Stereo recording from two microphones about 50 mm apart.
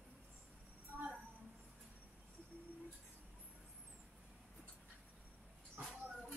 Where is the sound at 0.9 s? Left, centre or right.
Left.